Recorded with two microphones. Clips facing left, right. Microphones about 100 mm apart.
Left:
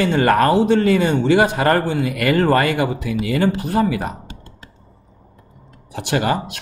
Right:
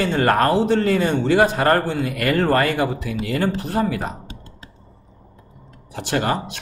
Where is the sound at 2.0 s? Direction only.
90° left.